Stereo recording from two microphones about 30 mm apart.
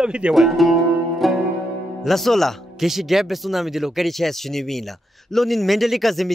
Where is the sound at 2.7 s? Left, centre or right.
Centre.